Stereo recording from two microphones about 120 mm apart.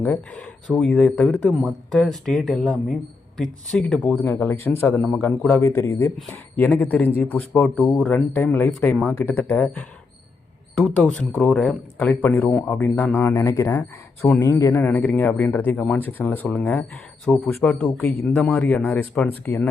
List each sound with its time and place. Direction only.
0.0 s speech: 15° left (ahead or behind)
4.2 s a man's voice: 20° left (ahead or behind)
5.4 s a man's voice: 25° left (ahead or behind)
11.5 s a man's voice: 5° left (ahead or behind); by 18.3 s 25° left (ahead or behind)
18.3 s speech: 10° left (ahead or behind)